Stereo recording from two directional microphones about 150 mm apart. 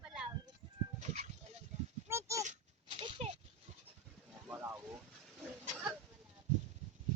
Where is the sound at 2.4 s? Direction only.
45° right (ahead or behind).